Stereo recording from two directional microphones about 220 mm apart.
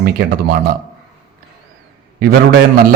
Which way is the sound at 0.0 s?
40° right (ahead or behind).